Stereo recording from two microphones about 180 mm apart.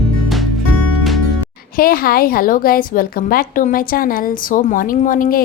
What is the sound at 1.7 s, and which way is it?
A woman's voice, 55° left (ahead or behind).